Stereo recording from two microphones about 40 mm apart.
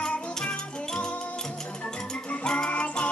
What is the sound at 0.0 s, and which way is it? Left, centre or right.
Music, left.